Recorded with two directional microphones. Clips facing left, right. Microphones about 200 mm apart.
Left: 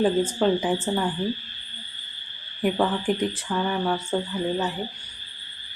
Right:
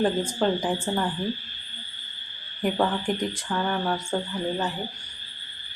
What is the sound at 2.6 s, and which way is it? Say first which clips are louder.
Speech: left 2 dB; 5° left (ahead or behind).